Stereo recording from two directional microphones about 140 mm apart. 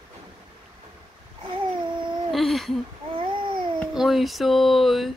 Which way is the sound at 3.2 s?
35° right (ahead or behind).